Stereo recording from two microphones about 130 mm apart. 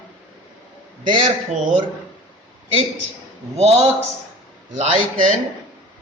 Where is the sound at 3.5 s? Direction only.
55° right (ahead or behind).